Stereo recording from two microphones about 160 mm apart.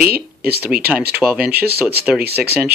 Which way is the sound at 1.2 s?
10° right (ahead or behind).